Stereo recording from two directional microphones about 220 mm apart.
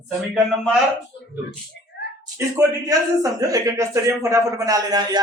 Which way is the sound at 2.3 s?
15° right (ahead or behind).